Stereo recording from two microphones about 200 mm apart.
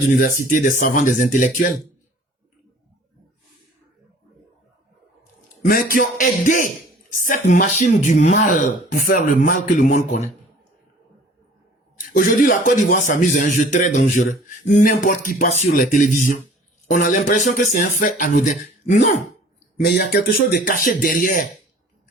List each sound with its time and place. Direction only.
0.2 s speech: 45° left (ahead or behind)
5.6 s speech: 45° left (ahead or behind)
11.9 s speech: 40° left (ahead or behind)
19.8 s speech: 55° left (ahead or behind)